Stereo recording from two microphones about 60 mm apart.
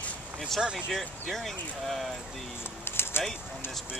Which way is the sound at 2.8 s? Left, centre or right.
Left.